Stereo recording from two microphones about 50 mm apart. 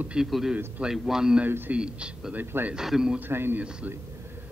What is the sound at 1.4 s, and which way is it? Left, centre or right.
Speech, right.